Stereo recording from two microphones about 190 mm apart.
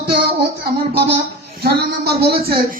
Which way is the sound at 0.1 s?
55° right (ahead or behind).